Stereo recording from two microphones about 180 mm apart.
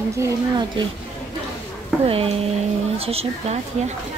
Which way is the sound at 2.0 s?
30° right (ahead or behind).